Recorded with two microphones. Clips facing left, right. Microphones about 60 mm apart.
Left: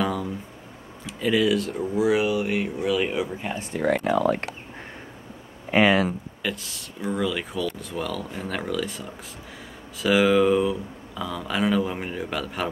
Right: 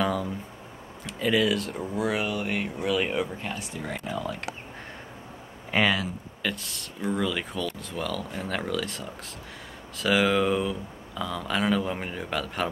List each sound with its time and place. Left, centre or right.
0.0 s a sound: centre
1.0 s speech: centre
3.7 s speech: left
6.4 s speech: centre